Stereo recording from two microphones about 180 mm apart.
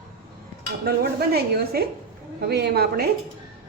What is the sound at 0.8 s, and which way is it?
Speech, 60° right (ahead or behind).